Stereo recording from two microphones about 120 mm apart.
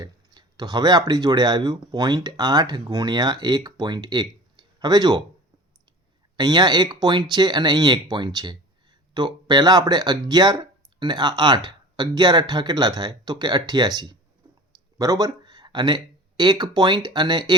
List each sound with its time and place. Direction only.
0.0 s speech: 35° right (ahead or behind)
6.3 s speech: 35° right (ahead or behind)